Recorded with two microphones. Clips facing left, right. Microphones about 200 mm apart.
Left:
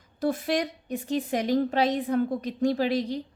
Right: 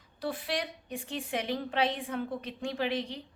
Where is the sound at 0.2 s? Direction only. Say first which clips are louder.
Left 8 dB; 45° left (ahead or behind).